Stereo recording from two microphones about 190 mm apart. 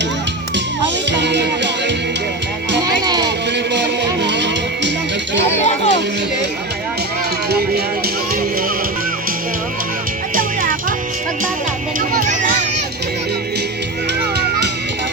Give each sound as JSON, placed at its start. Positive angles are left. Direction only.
{"t": 1.1, "sound": "music", "side_deg": -65}
{"t": 2.8, "sound": "music", "side_deg": -20}
{"t": 3.2, "sound": "music", "side_deg": -65}
{"t": 5.5, "sound": "music", "side_deg": 35}
{"t": 10.3, "sound": "music", "side_deg": -45}
{"t": 11.9, "sound": "music", "side_deg": -45}